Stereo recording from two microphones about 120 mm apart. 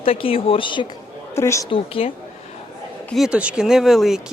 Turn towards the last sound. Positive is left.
turn(degrees=-5)  # may be behind; listen again after turning